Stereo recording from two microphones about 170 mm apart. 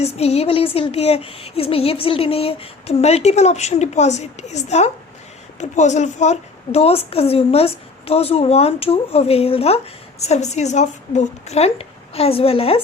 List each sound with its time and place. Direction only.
0.0 s a woman's voice: 40° left (ahead or behind)